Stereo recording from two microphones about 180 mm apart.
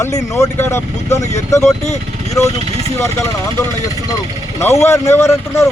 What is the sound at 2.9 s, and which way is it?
Speech, 15° left (ahead or behind).